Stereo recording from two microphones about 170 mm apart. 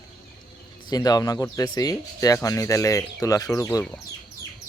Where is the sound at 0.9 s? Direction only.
25° left (ahead or behind).